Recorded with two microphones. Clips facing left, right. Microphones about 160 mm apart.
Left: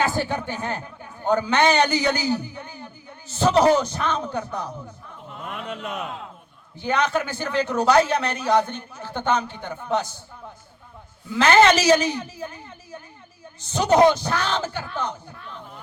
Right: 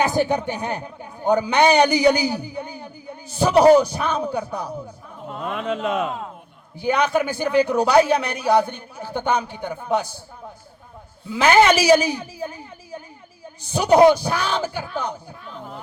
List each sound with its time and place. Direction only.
0.0 s a man's voice: 15° right (ahead or behind)
5.5 s speech: 90° right
6.7 s a man's voice: 10° right (ahead or behind)
11.3 s a man's voice: 10° right (ahead or behind)